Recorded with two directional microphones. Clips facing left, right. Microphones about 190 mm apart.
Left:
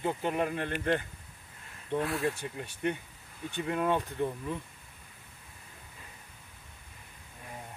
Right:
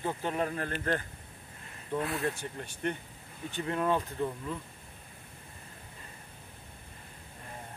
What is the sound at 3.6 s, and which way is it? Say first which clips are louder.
Speech: even; 5° left (ahead or behind).